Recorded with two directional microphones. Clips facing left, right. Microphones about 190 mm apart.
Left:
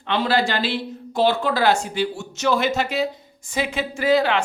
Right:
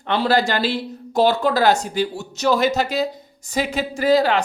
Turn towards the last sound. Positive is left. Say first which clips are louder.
# right 2 dB
turn(degrees=-40)  # may be behind; listen again after turning